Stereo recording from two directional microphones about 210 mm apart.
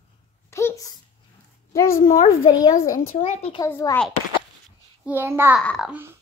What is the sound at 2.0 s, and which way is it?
Speech, 40° left (ahead or behind).